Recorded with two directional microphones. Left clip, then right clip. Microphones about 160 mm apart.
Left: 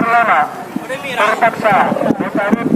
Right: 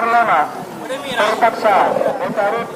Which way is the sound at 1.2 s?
10° right (ahead or behind).